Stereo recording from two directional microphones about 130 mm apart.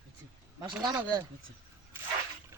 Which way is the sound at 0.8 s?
30° right (ahead or behind).